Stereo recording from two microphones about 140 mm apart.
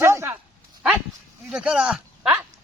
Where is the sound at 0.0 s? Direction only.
20° right (ahead or behind).